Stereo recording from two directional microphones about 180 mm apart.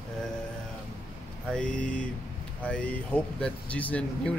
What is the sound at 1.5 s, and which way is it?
Speech, 5° left (ahead or behind).